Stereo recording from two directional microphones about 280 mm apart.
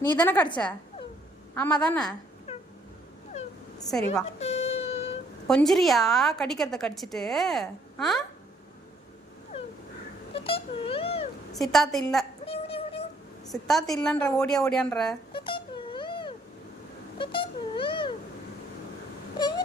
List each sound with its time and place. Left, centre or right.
0.1 s a woman's voice: centre
1.5 s a woman's voice: centre
4.4 s a sound: left
5.5 s a woman's voice: centre
10.3 s speech: centre
11.5 s a woman's voice: centre
12.5 s music: centre
13.5 s a woman's voice: centre
15.3 s cat: centre
19.4 s a sound: centre